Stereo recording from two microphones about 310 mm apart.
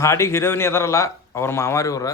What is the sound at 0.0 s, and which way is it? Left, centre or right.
A man's voice, centre.